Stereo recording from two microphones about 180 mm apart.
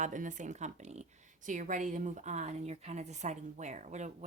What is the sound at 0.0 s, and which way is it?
Speech, 45° right (ahead or behind).